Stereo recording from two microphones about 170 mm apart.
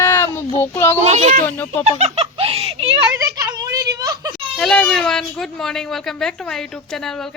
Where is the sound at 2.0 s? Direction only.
35° right (ahead or behind).